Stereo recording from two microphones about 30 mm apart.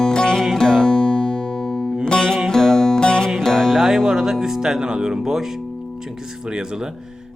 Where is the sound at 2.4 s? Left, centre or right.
Centre.